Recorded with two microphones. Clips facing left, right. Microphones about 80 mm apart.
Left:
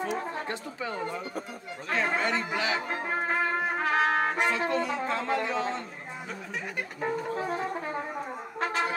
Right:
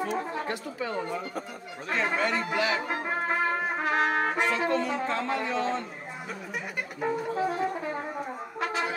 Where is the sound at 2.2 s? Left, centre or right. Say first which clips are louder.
Right 2 dB; left.